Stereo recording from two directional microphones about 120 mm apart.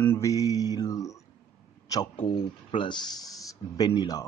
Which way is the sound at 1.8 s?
30° left (ahead or behind).